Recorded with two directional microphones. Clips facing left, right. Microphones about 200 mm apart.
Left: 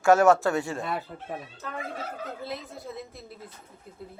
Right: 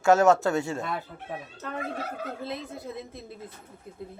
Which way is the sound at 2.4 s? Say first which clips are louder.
Right 2 dB; 20° right (ahead or behind).